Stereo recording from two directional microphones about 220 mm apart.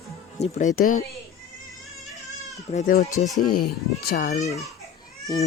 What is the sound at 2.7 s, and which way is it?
Speech, 35° left (ahead or behind).